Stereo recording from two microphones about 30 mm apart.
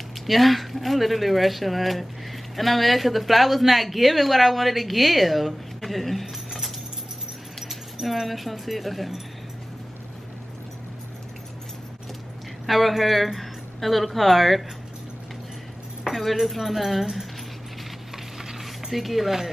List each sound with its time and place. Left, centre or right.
0.3 s speech: centre
7.6 s speech: centre
12.6 s speech: centre
16.4 s speech: centre
18.6 s speech: centre